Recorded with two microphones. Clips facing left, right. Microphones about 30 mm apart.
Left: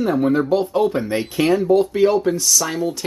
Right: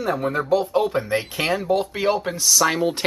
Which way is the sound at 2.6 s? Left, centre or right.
Right.